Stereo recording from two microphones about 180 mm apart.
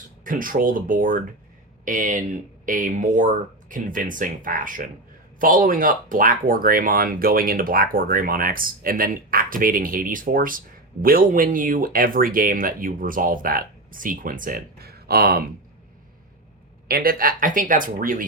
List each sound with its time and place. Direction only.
0.3 s speech: 50° right (ahead or behind)
16.9 s speech: 55° right (ahead or behind)